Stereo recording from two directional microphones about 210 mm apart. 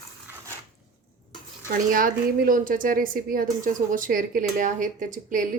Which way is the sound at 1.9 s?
40° right (ahead or behind).